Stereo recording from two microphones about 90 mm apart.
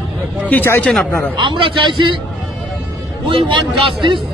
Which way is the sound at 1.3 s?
65° right (ahead or behind).